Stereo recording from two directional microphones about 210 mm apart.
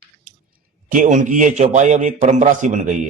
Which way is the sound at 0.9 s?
40° right (ahead or behind).